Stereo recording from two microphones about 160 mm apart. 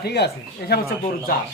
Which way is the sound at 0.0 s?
90° left.